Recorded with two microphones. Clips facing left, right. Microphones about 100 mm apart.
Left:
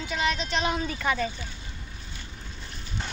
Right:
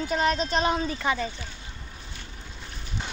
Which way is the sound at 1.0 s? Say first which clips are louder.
Even; 15° right (ahead or behind).